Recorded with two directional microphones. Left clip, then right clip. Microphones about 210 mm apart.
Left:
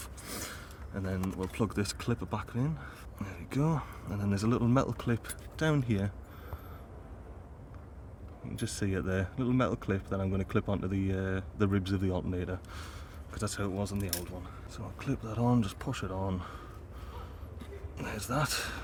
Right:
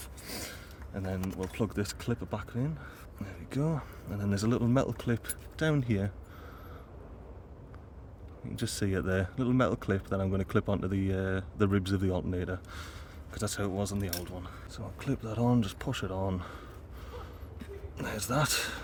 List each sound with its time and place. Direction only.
0.3 s speech: centre (ahead or behind)
8.5 s speech: 10° right (ahead or behind)
14.8 s speech: 10° right (ahead or behind)
17.9 s speech: 15° right (ahead or behind)